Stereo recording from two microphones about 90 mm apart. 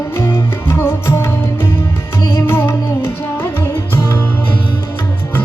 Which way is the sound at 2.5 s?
20° left (ahead or behind).